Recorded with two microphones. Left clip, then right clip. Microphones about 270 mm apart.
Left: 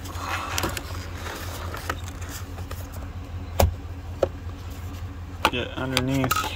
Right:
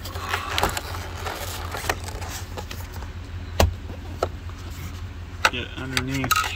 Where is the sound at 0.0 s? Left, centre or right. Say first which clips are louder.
Right 2 dB; centre.